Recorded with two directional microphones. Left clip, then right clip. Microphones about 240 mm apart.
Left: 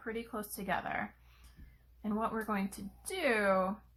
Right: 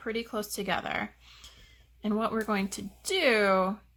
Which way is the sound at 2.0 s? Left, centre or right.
Right.